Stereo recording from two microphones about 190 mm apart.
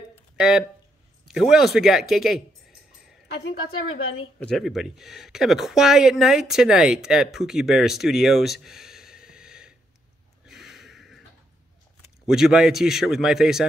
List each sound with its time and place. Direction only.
0.4 s speech: 5° right (ahead or behind)
1.2 s a sound: centre (ahead or behind)
3.3 s a woman's voice: 65° left (ahead or behind)
4.4 s speech: 5° left (ahead or behind)
10.4 s gasp: centre (ahead or behind)
12.3 s speech: 5° right (ahead or behind)